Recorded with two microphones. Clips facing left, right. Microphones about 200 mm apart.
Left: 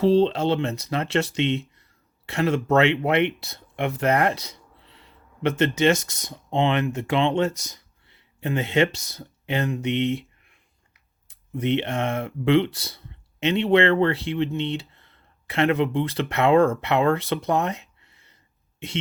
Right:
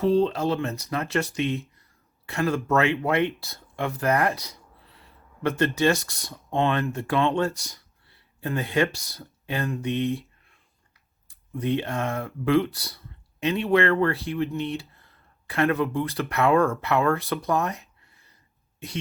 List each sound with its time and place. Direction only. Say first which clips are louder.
0.0 s speech: left 3 dB; 30° left (ahead or behind)